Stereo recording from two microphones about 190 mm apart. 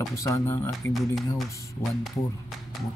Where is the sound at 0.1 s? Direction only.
15° left (ahead or behind).